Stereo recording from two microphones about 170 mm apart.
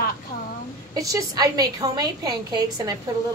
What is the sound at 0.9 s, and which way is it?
A woman's voice, 20° right (ahead or behind).